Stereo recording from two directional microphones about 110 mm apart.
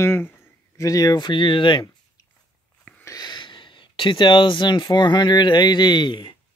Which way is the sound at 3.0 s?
35° left (ahead or behind).